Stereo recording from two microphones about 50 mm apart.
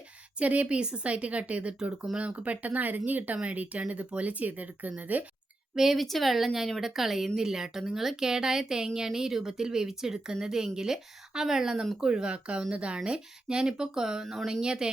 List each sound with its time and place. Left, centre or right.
0.3 s speech: right
5.7 s speech: centre